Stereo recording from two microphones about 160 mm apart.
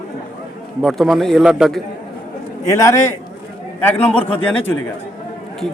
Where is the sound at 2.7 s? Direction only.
20° left (ahead or behind).